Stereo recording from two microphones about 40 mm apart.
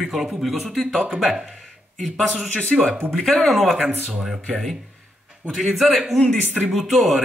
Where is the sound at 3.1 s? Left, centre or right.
Centre.